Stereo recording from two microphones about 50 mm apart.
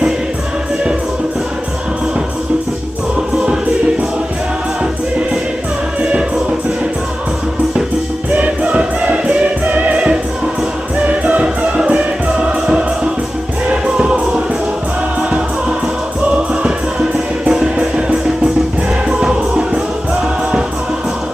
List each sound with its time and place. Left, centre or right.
8.3 s music: right
11.6 s music: right
16.3 s music: right